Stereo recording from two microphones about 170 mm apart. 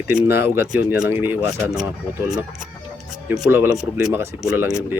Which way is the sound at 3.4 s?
15° right (ahead or behind).